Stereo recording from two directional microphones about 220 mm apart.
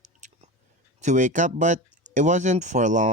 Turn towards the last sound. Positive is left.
turn(degrees=-35)  # may be behind; listen again after turning